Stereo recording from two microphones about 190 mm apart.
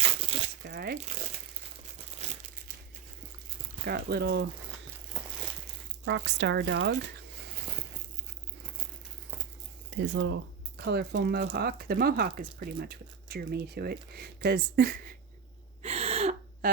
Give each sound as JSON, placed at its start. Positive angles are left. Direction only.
{"t": 0.0, "sound": "a sound", "side_deg": -30}
{"t": 0.7, "sound": "speech", "side_deg": -55}
{"t": 3.8, "sound": "speech", "side_deg": -55}
{"t": 5.2, "sound": "a sound", "side_deg": -5}
{"t": 6.1, "sound": "speech", "side_deg": -75}
{"t": 10.0, "sound": "speech", "side_deg": -85}
{"t": 10.8, "sound": "speech", "side_deg": -60}
{"t": 15.8, "sound": "gasp", "side_deg": -35}